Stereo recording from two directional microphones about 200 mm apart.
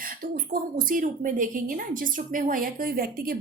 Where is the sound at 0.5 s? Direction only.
45° right (ahead or behind).